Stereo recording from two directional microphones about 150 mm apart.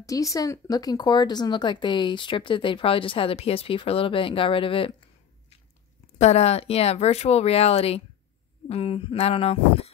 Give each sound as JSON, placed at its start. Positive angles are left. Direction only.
{"t": 0.0, "sound": "speech", "side_deg": 20}
{"t": 6.1, "sound": "speech", "side_deg": 45}